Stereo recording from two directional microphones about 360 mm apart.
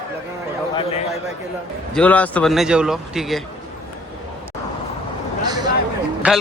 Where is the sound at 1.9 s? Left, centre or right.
Centre.